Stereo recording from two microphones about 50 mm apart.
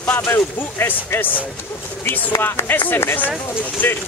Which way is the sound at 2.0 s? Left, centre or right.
Left.